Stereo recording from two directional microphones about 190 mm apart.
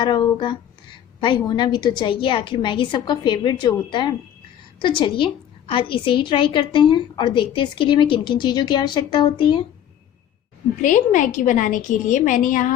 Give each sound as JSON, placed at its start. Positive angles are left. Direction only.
{"t": 0.0, "sound": "a woman's voice", "side_deg": 25}
{"t": 10.8, "sound": "a woman's voice", "side_deg": 40}